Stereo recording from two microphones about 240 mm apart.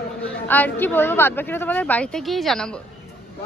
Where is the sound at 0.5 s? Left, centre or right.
Centre.